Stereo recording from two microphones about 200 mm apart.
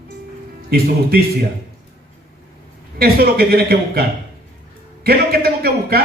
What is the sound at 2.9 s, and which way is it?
A man's voice, 50° right (ahead or behind).